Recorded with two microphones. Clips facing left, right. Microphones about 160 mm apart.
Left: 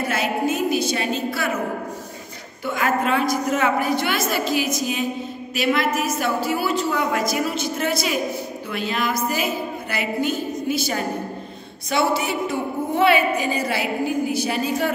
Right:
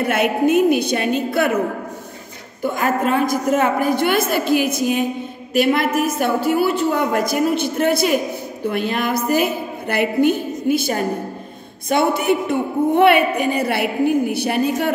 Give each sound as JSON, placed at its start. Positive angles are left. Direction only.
{"t": 0.0, "sound": "speech", "side_deg": -60}
{"t": 2.6, "sound": "a woman's voice", "side_deg": -50}